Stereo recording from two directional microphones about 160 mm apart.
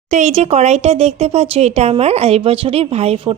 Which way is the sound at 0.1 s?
45° right (ahead or behind).